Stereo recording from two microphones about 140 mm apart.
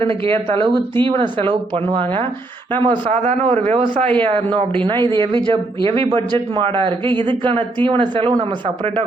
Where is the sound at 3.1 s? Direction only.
50° right (ahead or behind).